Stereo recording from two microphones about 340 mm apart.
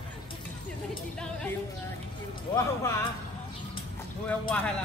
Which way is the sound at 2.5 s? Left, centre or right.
Centre.